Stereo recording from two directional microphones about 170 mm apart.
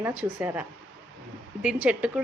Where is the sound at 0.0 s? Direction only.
10° right (ahead or behind).